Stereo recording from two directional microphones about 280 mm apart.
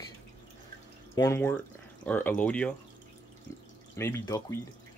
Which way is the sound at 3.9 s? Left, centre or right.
Centre.